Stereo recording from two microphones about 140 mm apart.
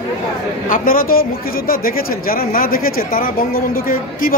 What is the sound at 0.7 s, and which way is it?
A man's voice, 90° left.